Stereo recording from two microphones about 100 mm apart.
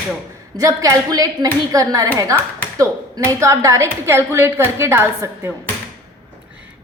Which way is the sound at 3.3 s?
30° right (ahead or behind).